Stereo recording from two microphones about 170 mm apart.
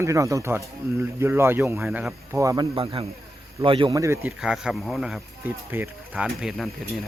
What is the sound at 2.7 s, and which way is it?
Speech, 30° right (ahead or behind).